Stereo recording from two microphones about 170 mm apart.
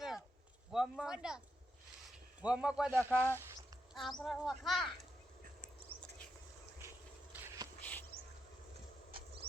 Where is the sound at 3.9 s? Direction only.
Centre (ahead or behind).